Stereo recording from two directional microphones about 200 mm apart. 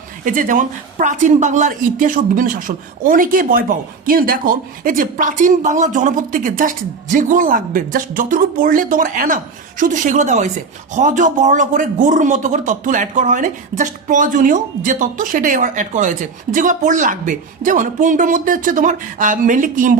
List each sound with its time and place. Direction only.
0.3 s a woman's voice: 40° right (ahead or behind)